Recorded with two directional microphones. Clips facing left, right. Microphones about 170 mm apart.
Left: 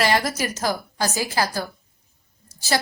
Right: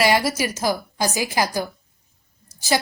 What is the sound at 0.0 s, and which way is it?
A woman's voice, 10° right (ahead or behind).